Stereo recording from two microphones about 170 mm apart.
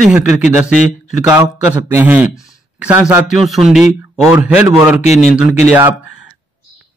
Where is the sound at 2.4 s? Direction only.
5° right (ahead or behind).